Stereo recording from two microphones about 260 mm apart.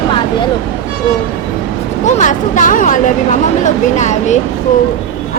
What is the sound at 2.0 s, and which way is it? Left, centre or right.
Speech, left.